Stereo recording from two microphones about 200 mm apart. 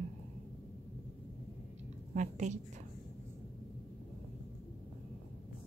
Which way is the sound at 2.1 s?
40° right (ahead or behind).